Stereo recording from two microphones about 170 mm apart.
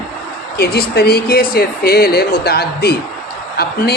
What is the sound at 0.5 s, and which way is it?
Speech, 65° left (ahead or behind).